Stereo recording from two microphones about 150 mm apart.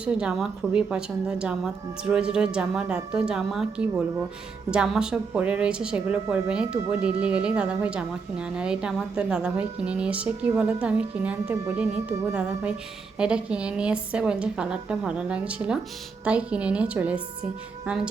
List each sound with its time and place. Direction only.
0.0 s a woman's voice: 5° right (ahead or behind)